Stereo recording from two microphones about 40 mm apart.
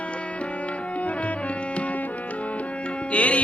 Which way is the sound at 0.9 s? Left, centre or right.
Left.